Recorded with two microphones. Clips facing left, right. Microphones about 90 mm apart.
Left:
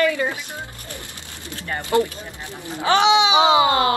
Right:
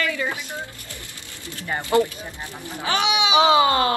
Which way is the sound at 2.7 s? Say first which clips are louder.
Left 7 dB; 25° left (ahead or behind).